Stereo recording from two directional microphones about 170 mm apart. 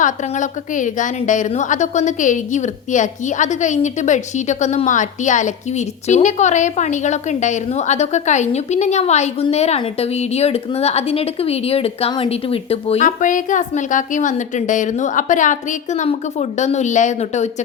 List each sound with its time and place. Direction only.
0.0 s a woman's voice: 50° left (ahead or behind)
13.1 s a woman's voice: 50° left (ahead or behind)